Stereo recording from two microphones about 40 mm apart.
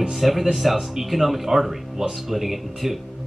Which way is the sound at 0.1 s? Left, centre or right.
Centre.